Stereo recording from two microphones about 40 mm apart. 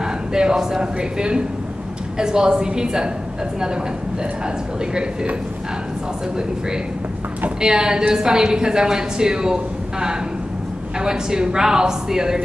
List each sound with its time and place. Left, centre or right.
0.0 s a woman's voice: centre
7.6 s a woman's voice: centre